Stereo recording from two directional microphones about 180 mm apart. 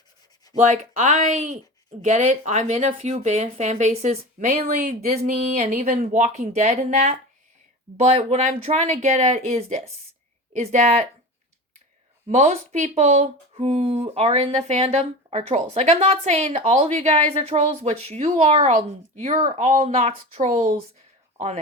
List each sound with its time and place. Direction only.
0.6 s speech: 40° right (ahead or behind)
12.3 s speech: 40° right (ahead or behind)